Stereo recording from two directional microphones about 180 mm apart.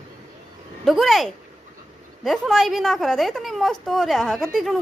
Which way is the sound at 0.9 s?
Centre (ahead or behind).